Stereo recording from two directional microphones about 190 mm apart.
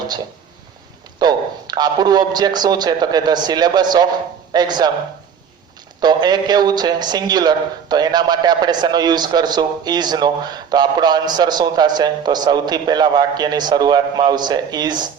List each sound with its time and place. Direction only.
1.2 s a man's voice: 20° right (ahead or behind)
6.0 s speech: 20° right (ahead or behind)